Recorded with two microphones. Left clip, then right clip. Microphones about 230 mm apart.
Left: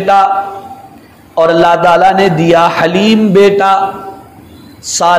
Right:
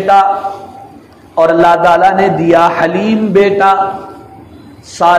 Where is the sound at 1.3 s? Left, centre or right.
Left.